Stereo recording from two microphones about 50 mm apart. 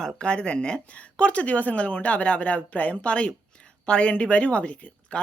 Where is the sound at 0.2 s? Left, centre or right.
Centre.